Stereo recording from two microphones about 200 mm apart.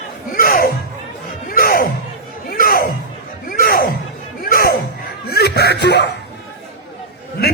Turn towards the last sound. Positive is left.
turn(degrees=50)  # may be behind; listen again after turning